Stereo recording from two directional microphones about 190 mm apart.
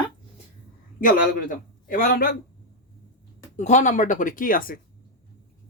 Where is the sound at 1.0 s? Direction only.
45° left (ahead or behind).